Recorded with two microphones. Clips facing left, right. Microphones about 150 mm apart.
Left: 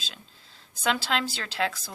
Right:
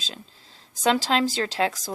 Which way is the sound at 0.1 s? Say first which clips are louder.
Right 7 dB; 35° right (ahead or behind).